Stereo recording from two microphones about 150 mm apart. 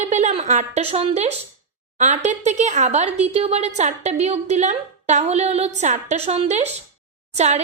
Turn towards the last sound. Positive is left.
turn(degrees=-45)  # may be behind; listen again after turning